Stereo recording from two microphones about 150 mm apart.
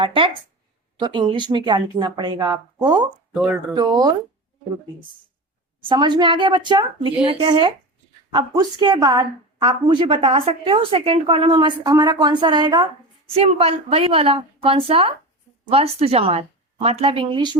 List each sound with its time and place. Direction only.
0.0 s a woman's voice: 35° right (ahead or behind)
3.3 s speech: 5° right (ahead or behind)
3.8 s speech: 25° right (ahead or behind)
5.8 s a woman's voice: 30° right (ahead or behind)
13.3 s a woman's voice: 40° right (ahead or behind)